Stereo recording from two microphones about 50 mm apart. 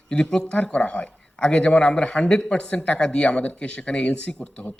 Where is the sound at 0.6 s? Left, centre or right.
Left.